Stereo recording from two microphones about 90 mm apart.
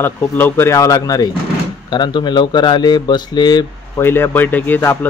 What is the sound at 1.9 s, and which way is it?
Speech, 55° left (ahead or behind).